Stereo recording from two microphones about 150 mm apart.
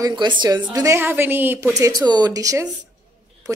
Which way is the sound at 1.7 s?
25° right (ahead or behind).